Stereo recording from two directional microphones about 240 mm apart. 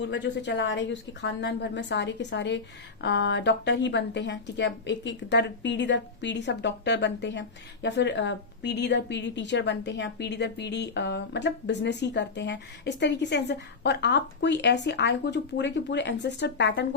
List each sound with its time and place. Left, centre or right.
0.0 s a woman's voice: left